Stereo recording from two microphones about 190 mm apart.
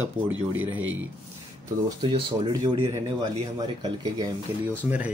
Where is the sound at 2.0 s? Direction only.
25° right (ahead or behind).